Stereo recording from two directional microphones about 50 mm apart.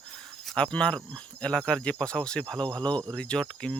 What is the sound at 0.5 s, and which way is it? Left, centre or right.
Speech, left.